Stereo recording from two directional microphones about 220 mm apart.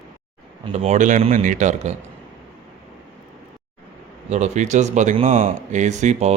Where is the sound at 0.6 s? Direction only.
25° right (ahead or behind).